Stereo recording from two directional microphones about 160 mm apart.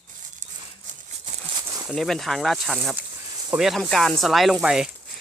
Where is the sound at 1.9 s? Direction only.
Centre (ahead or behind).